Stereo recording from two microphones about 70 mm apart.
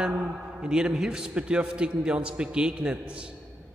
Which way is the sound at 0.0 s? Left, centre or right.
Centre.